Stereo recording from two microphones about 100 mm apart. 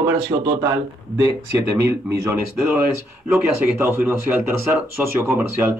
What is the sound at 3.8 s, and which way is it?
Speech, 20° right (ahead or behind).